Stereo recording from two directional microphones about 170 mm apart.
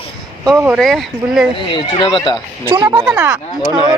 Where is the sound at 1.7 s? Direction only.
25° left (ahead or behind).